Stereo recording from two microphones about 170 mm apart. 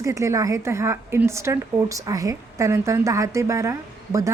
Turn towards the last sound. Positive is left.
turn(degrees=-20)  # may be behind; listen again after turning